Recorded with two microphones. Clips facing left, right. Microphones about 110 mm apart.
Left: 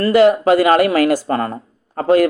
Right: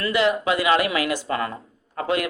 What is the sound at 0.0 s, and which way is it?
A man's voice, 45° left (ahead or behind).